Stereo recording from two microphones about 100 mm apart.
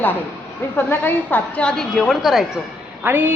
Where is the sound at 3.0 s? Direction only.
20° right (ahead or behind).